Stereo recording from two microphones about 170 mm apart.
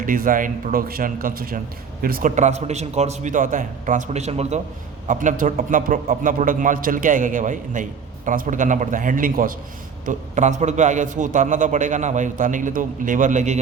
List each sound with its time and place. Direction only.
0.0 s a man's voice: 55° right (ahead or behind)
5.0 s a man's voice: 50° right (ahead or behind)